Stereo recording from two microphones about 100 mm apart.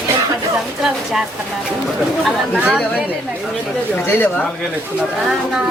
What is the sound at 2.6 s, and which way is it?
Speech, 15° right (ahead or behind).